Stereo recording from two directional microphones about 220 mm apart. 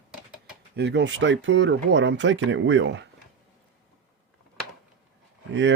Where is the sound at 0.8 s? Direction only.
50° right (ahead or behind).